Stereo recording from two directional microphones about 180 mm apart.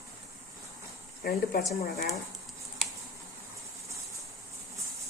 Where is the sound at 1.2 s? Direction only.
55° left (ahead or behind).